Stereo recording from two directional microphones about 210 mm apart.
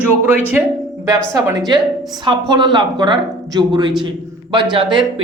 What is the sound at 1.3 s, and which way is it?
A woman's voice, 15° right (ahead or behind).